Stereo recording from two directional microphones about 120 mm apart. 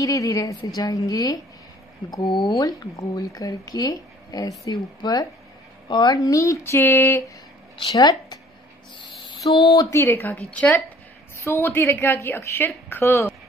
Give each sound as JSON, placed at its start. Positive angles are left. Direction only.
{"t": 0.0, "sound": "a woman's voice", "side_deg": 25}
{"t": 2.4, "sound": "speech", "side_deg": 30}
{"t": 7.9, "sound": "a woman's voice", "side_deg": 30}
{"t": 8.9, "sound": "a sound", "side_deg": 40}
{"t": 9.8, "sound": "speech", "side_deg": 25}